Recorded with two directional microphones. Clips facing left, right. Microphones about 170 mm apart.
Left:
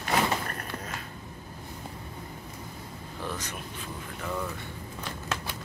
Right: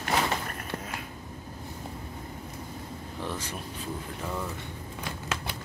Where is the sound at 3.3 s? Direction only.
30° right (ahead or behind).